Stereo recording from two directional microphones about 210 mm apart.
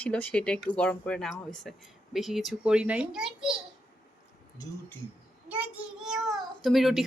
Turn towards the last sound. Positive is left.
turn(degrees=0)  # may be behind; listen again after turning